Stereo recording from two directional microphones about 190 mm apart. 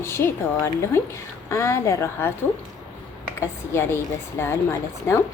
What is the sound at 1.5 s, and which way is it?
Speech, 15° left (ahead or behind).